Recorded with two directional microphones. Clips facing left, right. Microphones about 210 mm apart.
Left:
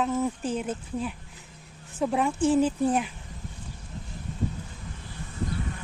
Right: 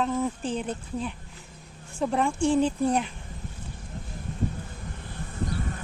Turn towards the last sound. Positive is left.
turn(degrees=-50)  # may be behind; listen again after turning